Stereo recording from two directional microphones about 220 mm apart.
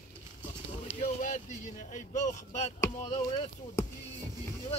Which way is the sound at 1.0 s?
35° left (ahead or behind).